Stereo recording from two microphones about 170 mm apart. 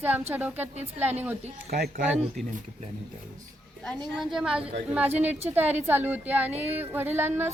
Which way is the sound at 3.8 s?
5° left (ahead or behind).